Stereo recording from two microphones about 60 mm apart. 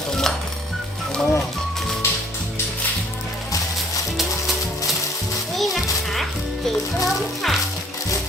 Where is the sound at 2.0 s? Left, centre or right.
Left.